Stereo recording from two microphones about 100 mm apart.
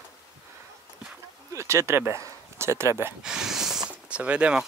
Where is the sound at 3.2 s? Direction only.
5° right (ahead or behind).